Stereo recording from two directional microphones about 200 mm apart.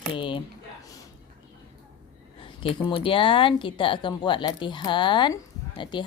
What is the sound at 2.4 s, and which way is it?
Speech, 25° left (ahead or behind).